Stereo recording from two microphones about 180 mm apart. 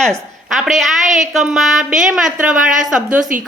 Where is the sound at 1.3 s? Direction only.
Centre (ahead or behind).